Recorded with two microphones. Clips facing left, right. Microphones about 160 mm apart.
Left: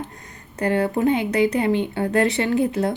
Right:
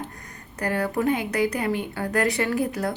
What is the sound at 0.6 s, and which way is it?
A woman's voice, 25° left (ahead or behind).